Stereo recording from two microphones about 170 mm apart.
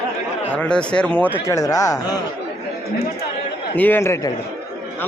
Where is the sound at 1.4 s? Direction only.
20° left (ahead or behind).